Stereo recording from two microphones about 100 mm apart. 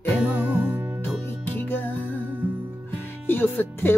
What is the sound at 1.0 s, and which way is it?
Music, 20° left (ahead or behind).